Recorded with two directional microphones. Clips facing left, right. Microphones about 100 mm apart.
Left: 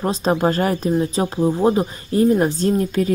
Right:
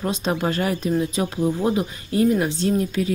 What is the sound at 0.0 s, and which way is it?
Speech, 35° left (ahead or behind).